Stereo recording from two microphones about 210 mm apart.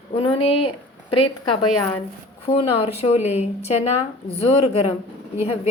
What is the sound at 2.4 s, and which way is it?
A woman's voice, 25° left (ahead or behind).